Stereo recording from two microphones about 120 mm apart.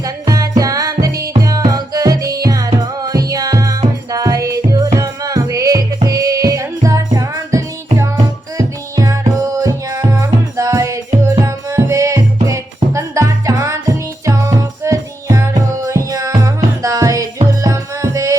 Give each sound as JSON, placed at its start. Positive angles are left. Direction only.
{"t": 0.0, "sound": "music", "side_deg": -30}